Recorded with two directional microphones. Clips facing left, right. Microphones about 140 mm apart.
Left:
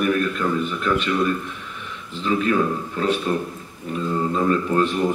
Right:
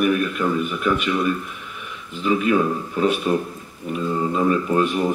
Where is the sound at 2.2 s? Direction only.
10° right (ahead or behind).